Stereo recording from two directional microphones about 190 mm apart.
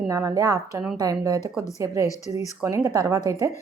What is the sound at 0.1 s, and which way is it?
A woman's voice, 15° right (ahead or behind).